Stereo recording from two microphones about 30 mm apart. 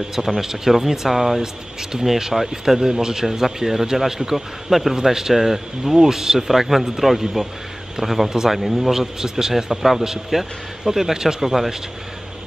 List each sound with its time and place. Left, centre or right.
0.4 s a man's voice: centre
8.9 s a man's voice: centre